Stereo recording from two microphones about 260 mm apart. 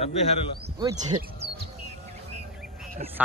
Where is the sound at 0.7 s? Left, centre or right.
Centre.